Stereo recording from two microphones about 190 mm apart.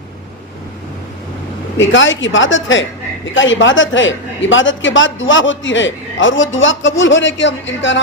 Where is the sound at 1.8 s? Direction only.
80° left.